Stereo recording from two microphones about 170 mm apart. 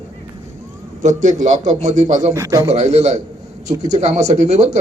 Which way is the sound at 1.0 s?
45° right (ahead or behind).